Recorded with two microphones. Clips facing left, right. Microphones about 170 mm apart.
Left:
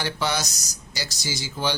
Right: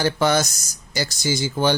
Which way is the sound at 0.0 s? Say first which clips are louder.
Right 8 dB; 50° right (ahead or behind).